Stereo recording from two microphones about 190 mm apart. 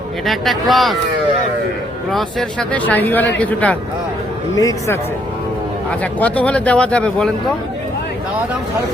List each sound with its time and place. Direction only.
0.3 s speech: centre (ahead or behind)
2.0 s speech: centre (ahead or behind)
4.5 s speech: 15° left (ahead or behind)
6.0 s speech: 10° left (ahead or behind)